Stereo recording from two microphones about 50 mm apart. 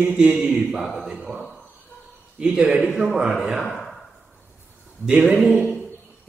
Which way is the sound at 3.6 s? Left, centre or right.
Centre.